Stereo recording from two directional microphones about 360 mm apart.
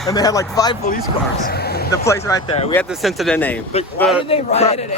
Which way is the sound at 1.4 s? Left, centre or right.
Left.